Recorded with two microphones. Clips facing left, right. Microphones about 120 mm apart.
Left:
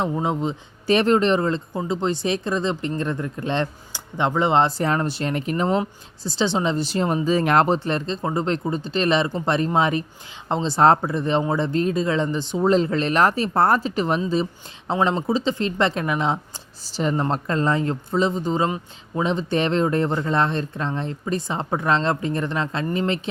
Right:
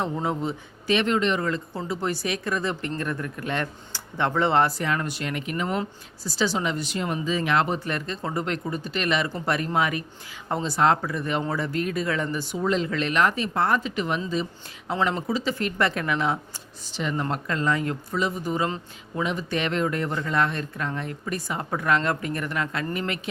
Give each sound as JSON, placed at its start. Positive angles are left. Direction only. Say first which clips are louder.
{"t": 0.0, "sound": "speech", "louder": "left 4 dB", "side_deg": 20}
{"t": 0.9, "sound": "speech", "louder": "left 5 dB", "side_deg": 40}
{"t": 4.8, "sound": "speech", "louder": "left 5 dB", "side_deg": 35}
{"t": 7.9, "sound": "speech", "louder": "left 5 dB", "side_deg": 25}
{"t": 16.9, "sound": "speech", "louder": "left 5 dB", "side_deg": 35}